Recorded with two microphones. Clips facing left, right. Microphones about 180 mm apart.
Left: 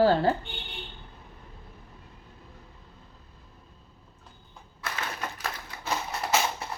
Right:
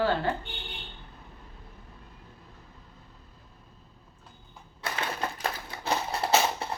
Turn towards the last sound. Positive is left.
turn(degrees=-30)  # may be behind; listen again after turning